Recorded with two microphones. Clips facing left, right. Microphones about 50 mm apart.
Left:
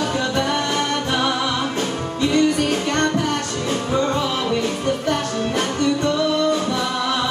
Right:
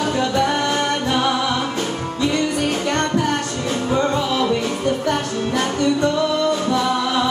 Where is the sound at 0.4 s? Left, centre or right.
Right.